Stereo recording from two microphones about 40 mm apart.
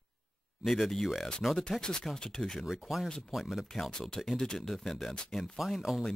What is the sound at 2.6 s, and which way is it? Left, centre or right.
Speech, centre.